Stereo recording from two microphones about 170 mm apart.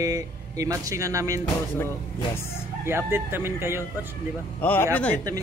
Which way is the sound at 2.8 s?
15° right (ahead or behind).